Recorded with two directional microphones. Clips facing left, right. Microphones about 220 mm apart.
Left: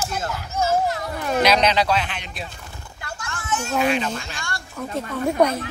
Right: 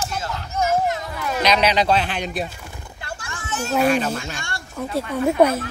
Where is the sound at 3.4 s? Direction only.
35° right (ahead or behind).